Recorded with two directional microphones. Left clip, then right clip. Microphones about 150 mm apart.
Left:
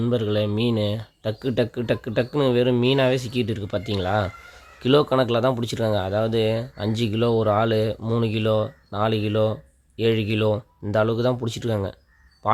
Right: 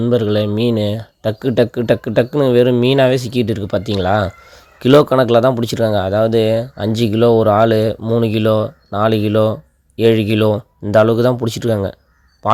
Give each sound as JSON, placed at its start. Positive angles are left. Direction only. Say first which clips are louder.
{"t": 0.0, "sound": "speech", "louder": "right 8 dB", "side_deg": -30}